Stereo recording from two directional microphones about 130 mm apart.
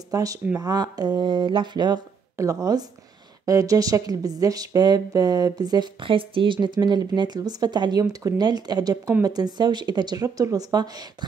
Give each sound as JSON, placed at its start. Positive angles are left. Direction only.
{"t": 0.1, "sound": "a woman's voice", "side_deg": -25}